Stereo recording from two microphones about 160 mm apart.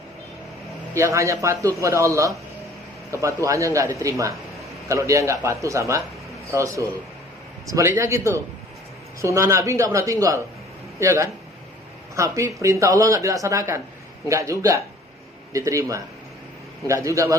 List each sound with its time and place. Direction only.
0.9 s a man's voice: 20° right (ahead or behind)
15.5 s a man's voice: 20° right (ahead or behind)